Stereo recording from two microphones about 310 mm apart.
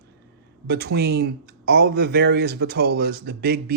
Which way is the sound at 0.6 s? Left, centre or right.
Right.